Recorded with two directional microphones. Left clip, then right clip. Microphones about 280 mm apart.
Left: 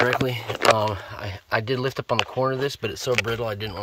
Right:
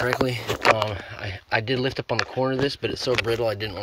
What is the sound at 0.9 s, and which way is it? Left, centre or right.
Speech, centre.